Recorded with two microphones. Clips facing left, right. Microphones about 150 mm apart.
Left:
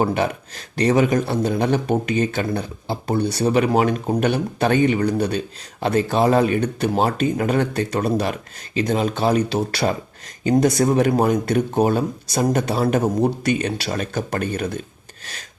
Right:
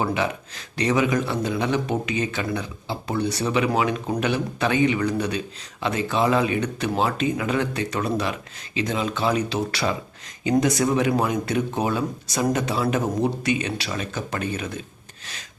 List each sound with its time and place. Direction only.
0.0 s a man's voice: 45° left (ahead or behind)